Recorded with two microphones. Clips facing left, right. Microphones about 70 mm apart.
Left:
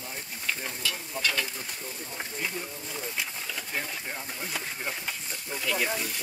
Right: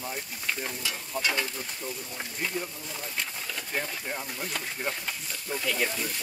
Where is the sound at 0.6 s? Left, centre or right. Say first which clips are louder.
Even; centre.